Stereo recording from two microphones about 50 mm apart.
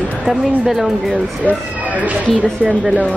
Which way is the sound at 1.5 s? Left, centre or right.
Right.